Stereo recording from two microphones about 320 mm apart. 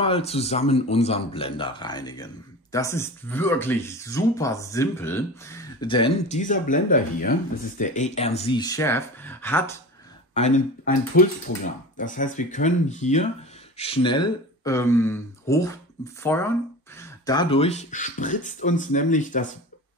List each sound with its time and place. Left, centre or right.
0.0 s speech: centre
10.3 s speech: left